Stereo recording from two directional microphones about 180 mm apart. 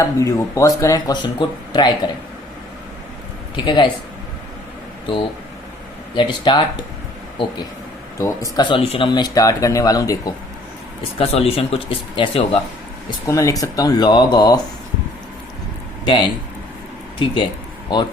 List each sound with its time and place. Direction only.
0.0 s speech: 15° left (ahead or behind)
3.5 s speech: 25° left (ahead or behind)
6.1 s speech: 25° left (ahead or behind)
8.2 s speech: 20° left (ahead or behind)
8.8 s speech: 30° left (ahead or behind)
11.2 s speech: 35° left (ahead or behind)
13.1 s speech: 15° left (ahead or behind)
16.0 s speech: 25° left (ahead or behind)
17.2 s a sound: 25° left (ahead or behind)